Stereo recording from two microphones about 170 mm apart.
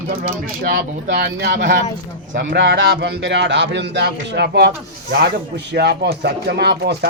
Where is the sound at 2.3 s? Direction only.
90° right.